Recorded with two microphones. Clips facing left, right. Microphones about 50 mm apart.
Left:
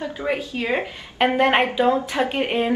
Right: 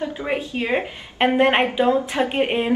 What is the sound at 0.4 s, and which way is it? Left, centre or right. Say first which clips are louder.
Speech: right 1 dB; right.